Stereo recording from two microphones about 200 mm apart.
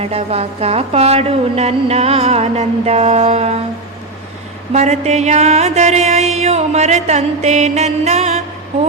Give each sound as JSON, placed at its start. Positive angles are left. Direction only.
{"t": 0.0, "sound": "music", "side_deg": -30}
{"t": 4.7, "sound": "music", "side_deg": -35}